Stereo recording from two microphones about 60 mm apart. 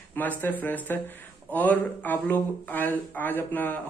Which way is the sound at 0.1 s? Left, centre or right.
Left.